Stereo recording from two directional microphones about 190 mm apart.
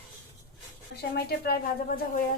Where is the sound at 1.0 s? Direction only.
55° left (ahead or behind).